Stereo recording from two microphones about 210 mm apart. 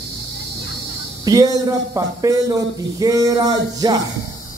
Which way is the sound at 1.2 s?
15° right (ahead or behind).